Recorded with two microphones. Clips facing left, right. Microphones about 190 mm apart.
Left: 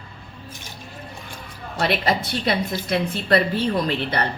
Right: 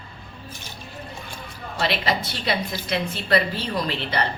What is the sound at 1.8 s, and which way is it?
A woman's voice, 55° left (ahead or behind).